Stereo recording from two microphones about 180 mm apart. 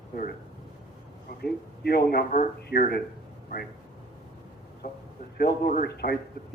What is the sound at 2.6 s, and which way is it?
Speech, 65° left (ahead or behind).